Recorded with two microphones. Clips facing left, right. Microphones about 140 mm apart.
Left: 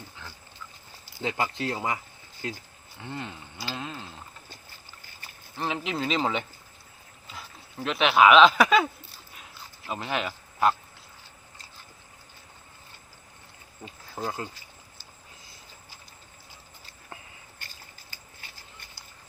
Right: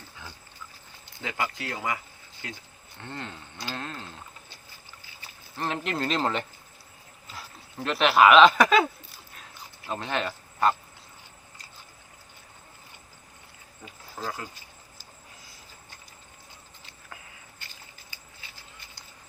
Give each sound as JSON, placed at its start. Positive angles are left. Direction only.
{"t": 1.2, "sound": "speech", "side_deg": 25}
{"t": 3.0, "sound": "speech", "side_deg": 10}
{"t": 5.5, "sound": "speech", "side_deg": 0}
{"t": 9.3, "sound": "dog", "side_deg": 5}
{"t": 13.8, "sound": "speech", "side_deg": 25}